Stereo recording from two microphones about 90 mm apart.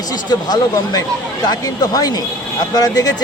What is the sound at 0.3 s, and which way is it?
Speech, 50° left (ahead or behind).